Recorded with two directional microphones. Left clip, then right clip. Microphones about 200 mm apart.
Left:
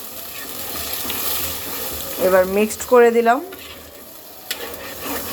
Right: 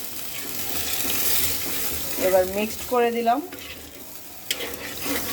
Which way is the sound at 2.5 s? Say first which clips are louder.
Left 9 dB; 15° left (ahead or behind).